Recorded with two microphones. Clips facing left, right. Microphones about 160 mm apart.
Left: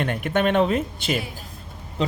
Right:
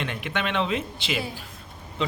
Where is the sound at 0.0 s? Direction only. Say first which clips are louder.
Left 7 dB; 50° left (ahead or behind).